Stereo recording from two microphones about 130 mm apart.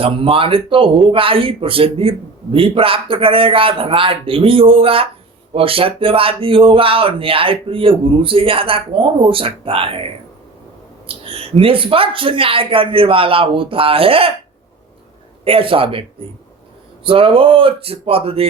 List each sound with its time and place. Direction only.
0.0 s speech: 45° right (ahead or behind)
11.1 s speech: 45° right (ahead or behind)
15.4 s speech: 45° right (ahead or behind)